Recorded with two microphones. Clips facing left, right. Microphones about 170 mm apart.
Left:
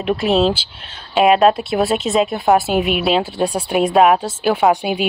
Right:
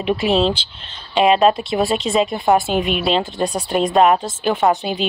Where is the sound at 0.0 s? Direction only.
Centre (ahead or behind).